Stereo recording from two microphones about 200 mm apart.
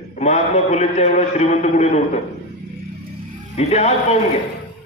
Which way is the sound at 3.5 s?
35° left (ahead or behind).